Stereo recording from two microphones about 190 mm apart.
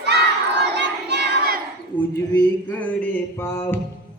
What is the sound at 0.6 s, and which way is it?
Crowd, 60° right (ahead or behind).